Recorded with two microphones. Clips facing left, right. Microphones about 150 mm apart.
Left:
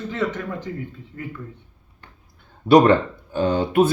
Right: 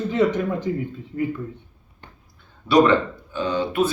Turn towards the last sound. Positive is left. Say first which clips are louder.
# left 4 dB
turn(degrees=50)  # may be behind; listen again after turning